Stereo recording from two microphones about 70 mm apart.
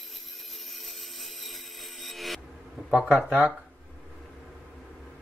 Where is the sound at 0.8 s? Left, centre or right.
Centre.